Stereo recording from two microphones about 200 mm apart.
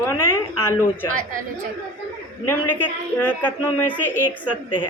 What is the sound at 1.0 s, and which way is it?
Speech, 40° right (ahead or behind).